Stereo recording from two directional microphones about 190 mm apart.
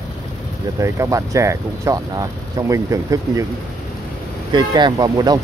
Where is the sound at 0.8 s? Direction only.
15° right (ahead or behind).